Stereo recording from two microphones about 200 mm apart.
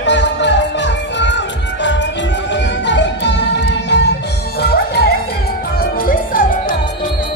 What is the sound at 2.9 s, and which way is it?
Music, 60° left (ahead or behind).